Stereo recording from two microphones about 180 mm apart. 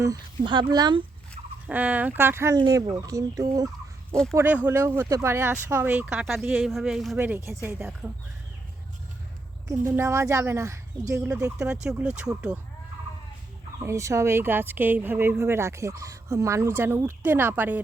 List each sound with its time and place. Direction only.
0.0 s speech: 20° right (ahead or behind)
1.6 s speech: 10° right (ahead or behind)
9.6 s speech: 15° right (ahead or behind)
11.6 s speech: 5° right (ahead or behind)
13.7 s speech: 15° right (ahead or behind)